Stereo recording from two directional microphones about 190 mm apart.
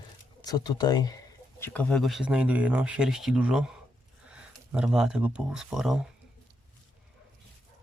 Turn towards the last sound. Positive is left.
turn(degrees=0)  # may be behind; listen again after turning